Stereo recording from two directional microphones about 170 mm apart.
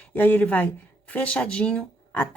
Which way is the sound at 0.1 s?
10° left (ahead or behind).